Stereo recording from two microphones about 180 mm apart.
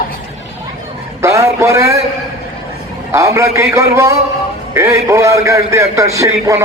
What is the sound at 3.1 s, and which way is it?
A man's voice, 15° right (ahead or behind).